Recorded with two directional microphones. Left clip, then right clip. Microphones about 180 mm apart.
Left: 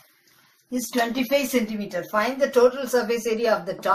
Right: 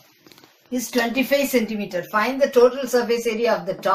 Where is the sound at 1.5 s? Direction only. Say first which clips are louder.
Right 3 dB; 15° right (ahead or behind).